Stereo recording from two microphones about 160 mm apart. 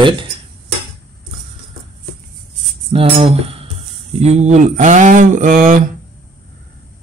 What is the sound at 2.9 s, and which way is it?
Cutlery, 35° right (ahead or behind).